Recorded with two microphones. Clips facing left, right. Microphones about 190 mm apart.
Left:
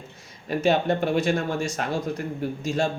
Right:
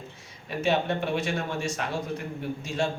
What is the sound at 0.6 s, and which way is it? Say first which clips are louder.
Speech: left 4 dB; 40° left (ahead or behind).